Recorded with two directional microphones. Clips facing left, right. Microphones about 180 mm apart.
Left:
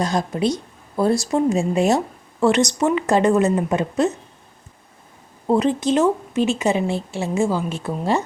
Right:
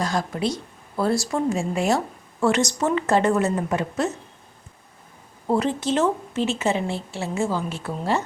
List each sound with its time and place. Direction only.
0.0 s a woman's voice: 20° left (ahead or behind)
5.5 s speech: 15° left (ahead or behind)